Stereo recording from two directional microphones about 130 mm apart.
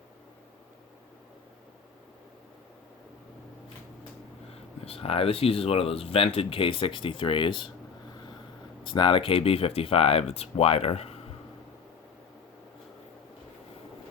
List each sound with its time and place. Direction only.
4.5 s speech: 50° left (ahead or behind)
8.8 s speech: 40° left (ahead or behind)